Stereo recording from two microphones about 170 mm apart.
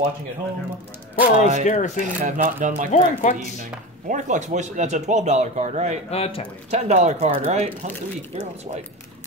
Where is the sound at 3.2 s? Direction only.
45° left (ahead or behind).